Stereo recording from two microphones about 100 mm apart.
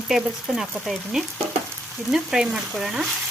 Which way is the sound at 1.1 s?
10° right (ahead or behind).